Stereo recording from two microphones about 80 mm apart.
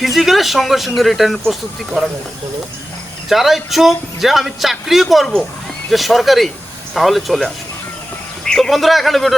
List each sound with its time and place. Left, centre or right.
0.0 s speech: centre
3.2 s speech: centre